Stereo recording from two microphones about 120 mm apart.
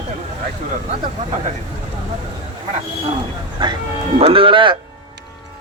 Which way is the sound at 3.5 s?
40° right (ahead or behind).